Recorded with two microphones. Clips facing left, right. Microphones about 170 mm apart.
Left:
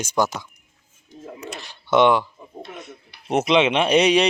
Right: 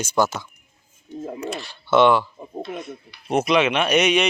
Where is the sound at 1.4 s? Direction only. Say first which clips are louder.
Right 6 dB; 20° left (ahead or behind).